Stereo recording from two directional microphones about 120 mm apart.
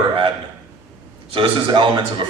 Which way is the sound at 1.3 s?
45° right (ahead or behind).